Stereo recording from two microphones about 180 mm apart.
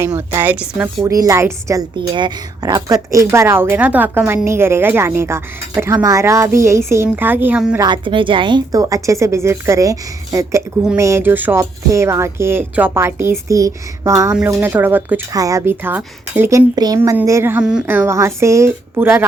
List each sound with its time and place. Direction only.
0.0 s speech: 15° right (ahead or behind)
1.1 s speech: 20° right (ahead or behind)
7.8 s speech: 25° right (ahead or behind)